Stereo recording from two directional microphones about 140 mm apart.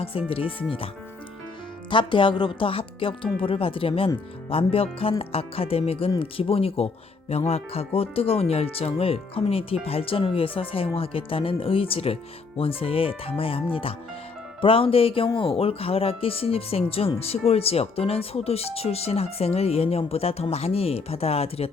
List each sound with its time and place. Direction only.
0.0 s speech: 40° left (ahead or behind)
1.9 s speech: 35° left (ahead or behind)